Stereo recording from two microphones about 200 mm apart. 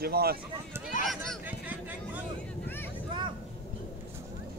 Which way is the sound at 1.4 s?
10° right (ahead or behind).